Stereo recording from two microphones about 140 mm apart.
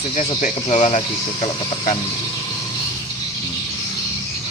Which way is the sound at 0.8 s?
50° left (ahead or behind).